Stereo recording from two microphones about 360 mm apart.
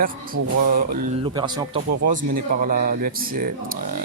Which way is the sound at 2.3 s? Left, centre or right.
Right.